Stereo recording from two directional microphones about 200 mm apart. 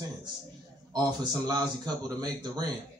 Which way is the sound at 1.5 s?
20° right (ahead or behind).